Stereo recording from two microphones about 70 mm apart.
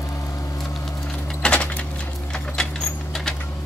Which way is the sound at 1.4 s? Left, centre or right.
Centre.